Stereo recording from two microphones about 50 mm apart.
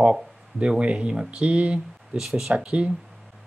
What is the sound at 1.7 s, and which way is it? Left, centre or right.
Speech, centre.